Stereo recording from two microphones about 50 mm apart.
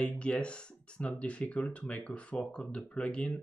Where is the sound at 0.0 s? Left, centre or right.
Left.